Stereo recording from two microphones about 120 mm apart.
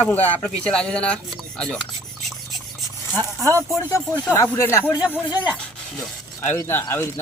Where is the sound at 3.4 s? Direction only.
25° right (ahead or behind).